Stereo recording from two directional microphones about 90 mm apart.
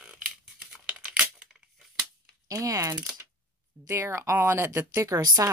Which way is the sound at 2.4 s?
40° right (ahead or behind).